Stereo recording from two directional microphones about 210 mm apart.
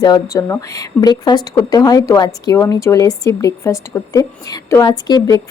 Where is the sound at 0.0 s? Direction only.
15° left (ahead or behind).